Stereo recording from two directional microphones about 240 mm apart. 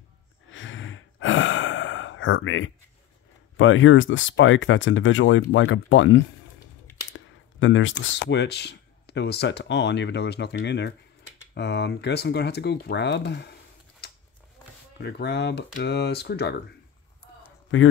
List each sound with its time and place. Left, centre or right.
0.5 s gasp: left
3.5 s speech: left
7.1 s a sound: left
8.0 s speech: left
15.0 s speech: left